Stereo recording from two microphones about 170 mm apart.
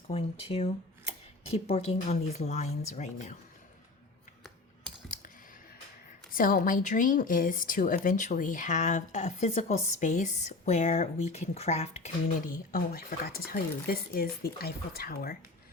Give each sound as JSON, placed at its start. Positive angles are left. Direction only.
{"t": 0.1, "sound": "speech", "side_deg": 35}
{"t": 6.3, "sound": "a woman's voice", "side_deg": 55}
{"t": 12.7, "sound": "speech", "side_deg": 60}